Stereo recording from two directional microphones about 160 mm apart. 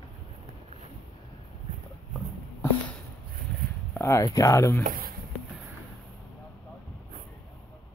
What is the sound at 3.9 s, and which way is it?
Speech, 15° left (ahead or behind).